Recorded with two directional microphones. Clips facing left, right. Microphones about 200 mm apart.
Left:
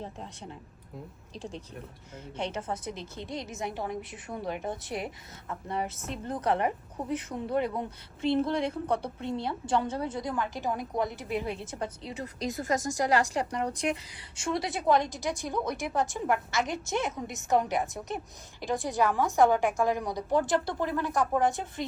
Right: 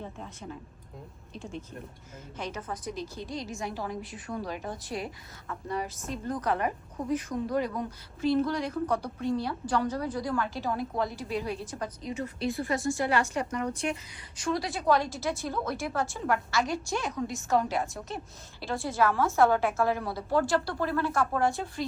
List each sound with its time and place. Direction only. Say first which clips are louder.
0.0 s a woman's voice: even; 30° left (ahead or behind)